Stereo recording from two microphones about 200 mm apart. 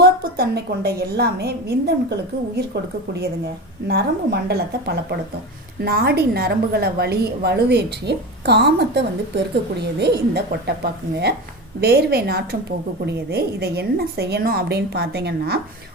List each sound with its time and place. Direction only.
0.0 s a woman's voice: 50° right (ahead or behind)
11.8 s a woman's voice: 50° right (ahead or behind)